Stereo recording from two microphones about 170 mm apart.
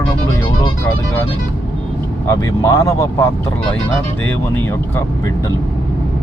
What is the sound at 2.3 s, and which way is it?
Speech, 15° left (ahead or behind).